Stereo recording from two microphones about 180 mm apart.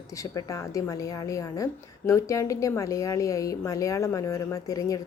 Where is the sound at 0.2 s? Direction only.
20° left (ahead or behind).